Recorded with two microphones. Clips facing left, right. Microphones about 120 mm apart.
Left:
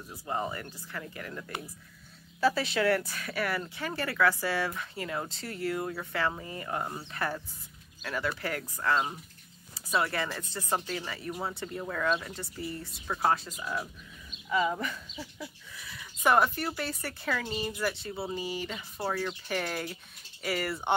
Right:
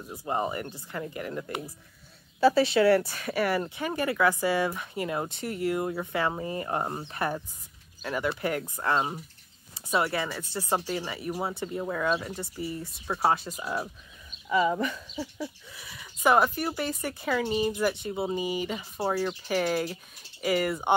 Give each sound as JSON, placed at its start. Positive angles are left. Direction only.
{"t": 0.1, "sound": "speech", "side_deg": -20}
{"t": 3.7, "sound": "speech", "side_deg": -15}
{"t": 7.1, "sound": "speech", "side_deg": -20}
{"t": 9.8, "sound": "a sound", "side_deg": -20}
{"t": 10.0, "sound": "speech", "side_deg": -5}
{"t": 12.2, "sound": "speech", "side_deg": -25}
{"t": 12.5, "sound": "speech", "side_deg": -10}
{"t": 13.5, "sound": "speech", "side_deg": -30}
{"t": 14.8, "sound": "speech", "side_deg": -20}
{"t": 18.8, "sound": "speech", "side_deg": -30}
{"t": 19.2, "sound": "speech", "side_deg": -10}